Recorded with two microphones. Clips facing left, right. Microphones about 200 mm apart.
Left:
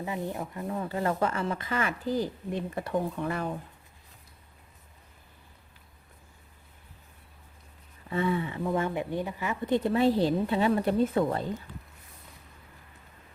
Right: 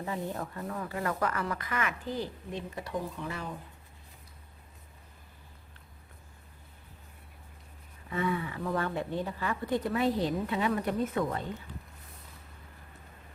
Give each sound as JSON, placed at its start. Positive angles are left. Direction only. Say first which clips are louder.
{"t": 0.0, "sound": "a woman's voice", "louder": "left 2 dB", "side_deg": 15}
{"t": 8.1, "sound": "a woman's voice", "louder": "left 3 dB", "side_deg": 30}